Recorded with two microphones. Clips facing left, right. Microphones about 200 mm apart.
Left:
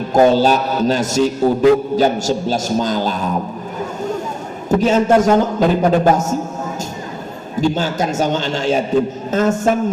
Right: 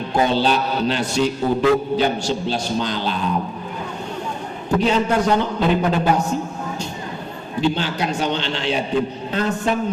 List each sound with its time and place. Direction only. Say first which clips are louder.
0.1 s a man's voice: left 7 dB; 45° left (ahead or behind)
4.8 s a man's voice: left 6 dB; 45° left (ahead or behind)
7.6 s a man's voice: left 3 dB; 45° left (ahead or behind)